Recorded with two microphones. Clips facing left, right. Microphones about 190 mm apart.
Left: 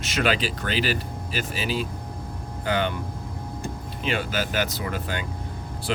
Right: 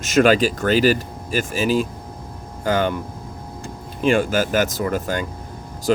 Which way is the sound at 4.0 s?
45° right (ahead or behind).